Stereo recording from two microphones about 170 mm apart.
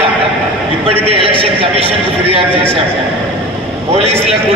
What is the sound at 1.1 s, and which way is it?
A man's voice, 35° right (ahead or behind).